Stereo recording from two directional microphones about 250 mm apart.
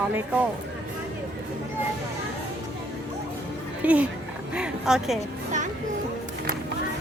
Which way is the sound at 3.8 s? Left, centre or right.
Centre.